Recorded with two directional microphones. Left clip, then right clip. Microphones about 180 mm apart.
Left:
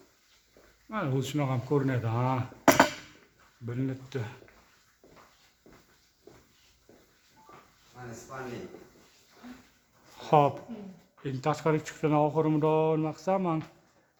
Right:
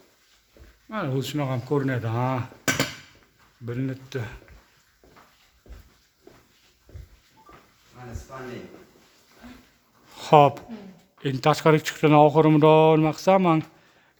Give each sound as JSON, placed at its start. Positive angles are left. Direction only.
{"t": 0.9, "sound": "speech", "side_deg": -25}
{"t": 3.7, "sound": "speech", "side_deg": -30}
{"t": 10.2, "sound": "speech", "side_deg": -40}